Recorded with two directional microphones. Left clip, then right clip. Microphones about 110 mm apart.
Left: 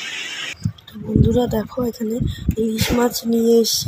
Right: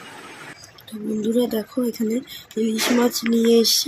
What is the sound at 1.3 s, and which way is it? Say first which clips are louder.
Speech: left 1 dB; 30° left (ahead or behind).